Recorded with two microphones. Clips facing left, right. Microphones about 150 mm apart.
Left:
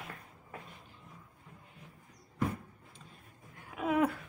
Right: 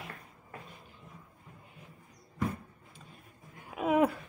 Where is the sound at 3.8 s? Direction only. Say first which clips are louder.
Right 3 dB; 15° right (ahead or behind).